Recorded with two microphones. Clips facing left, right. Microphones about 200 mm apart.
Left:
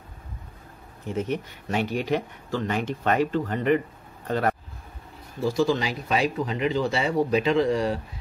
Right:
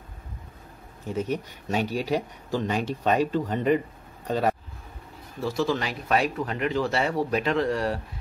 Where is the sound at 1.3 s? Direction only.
40° right (ahead or behind).